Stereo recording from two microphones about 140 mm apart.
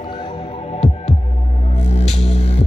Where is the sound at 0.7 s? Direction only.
50° left (ahead or behind).